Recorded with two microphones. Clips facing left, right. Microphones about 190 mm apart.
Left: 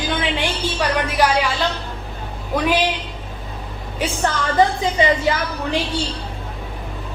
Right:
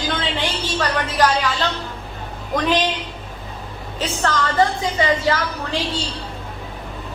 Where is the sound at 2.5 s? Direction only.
10° left (ahead or behind).